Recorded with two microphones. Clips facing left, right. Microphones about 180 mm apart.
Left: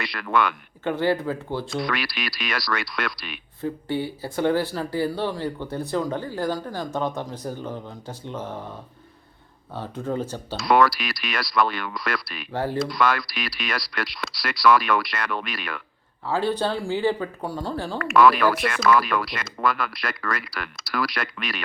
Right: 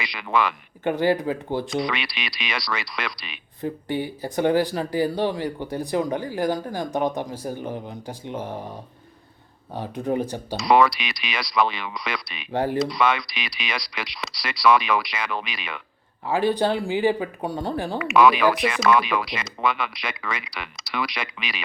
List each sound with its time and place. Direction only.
0.0 s speech: centre (ahead or behind)
0.9 s speech: 15° right (ahead or behind)
1.7 s speech: centre (ahead or behind)
3.6 s speech: 15° right (ahead or behind)
10.6 s speech: centre (ahead or behind)
12.5 s speech: 20° right (ahead or behind)
12.8 s speech: centre (ahead or behind)
16.2 s speech: 15° right (ahead or behind)
18.1 s speech: centre (ahead or behind)